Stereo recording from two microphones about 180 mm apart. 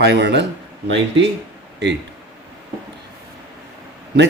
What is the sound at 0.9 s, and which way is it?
Speech, 90° right.